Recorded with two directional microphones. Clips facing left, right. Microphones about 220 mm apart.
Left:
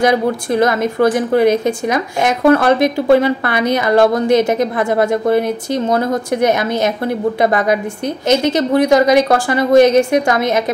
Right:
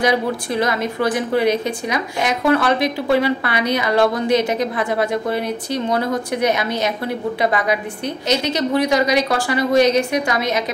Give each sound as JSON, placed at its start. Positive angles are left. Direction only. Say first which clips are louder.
{"t": 0.0, "sound": "a woman's voice", "louder": "left 4 dB", "side_deg": 45}